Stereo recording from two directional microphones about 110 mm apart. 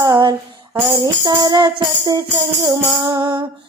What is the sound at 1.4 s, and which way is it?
Music, 40° right (ahead or behind).